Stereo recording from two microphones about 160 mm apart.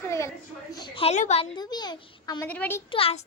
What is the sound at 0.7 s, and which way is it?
Speech, 25° left (ahead or behind).